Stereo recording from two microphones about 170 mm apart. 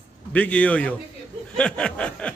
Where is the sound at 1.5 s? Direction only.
5° left (ahead or behind).